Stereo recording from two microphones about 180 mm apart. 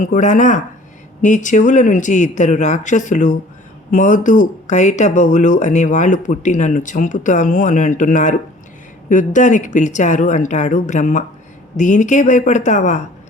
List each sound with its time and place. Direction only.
0.0 s speech: 45° left (ahead or behind)